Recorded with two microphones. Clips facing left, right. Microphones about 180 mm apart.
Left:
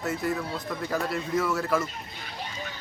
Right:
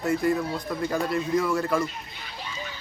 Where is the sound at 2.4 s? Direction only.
55° left (ahead or behind).